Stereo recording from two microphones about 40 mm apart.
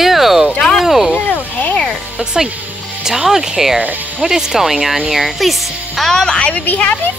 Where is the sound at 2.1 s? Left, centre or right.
Centre.